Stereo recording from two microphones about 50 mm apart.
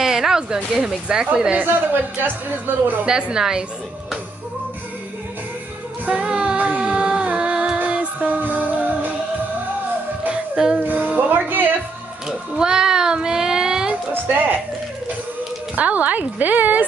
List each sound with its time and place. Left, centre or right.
0.0 s a sound: centre
0.8 s a child's voice: centre
2.2 s a woman's voice: right
3.1 s a child's voice: centre
6.0 s music: right
10.3 s a sound: centre
10.8 s music: right
12.3 s a child's voice: centre
14.1 s a woman's voice: right
15.7 s a woman's voice: right